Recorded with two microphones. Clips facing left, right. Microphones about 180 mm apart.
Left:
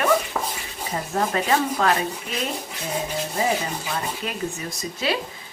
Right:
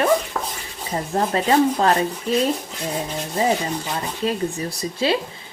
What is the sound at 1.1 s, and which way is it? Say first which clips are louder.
Speech: right 4 dB; 30° right (ahead or behind).